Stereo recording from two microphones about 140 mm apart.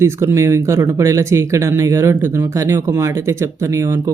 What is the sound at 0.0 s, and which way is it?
Speech, 20° right (ahead or behind).